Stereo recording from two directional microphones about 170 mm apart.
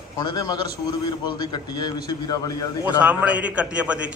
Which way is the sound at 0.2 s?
25° left (ahead or behind).